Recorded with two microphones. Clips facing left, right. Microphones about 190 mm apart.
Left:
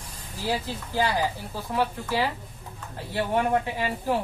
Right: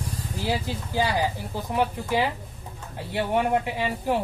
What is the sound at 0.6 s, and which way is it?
Speech, 10° right (ahead or behind).